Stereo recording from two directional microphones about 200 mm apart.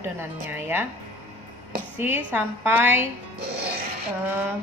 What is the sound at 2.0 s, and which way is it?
A woman's voice, 10° right (ahead or behind).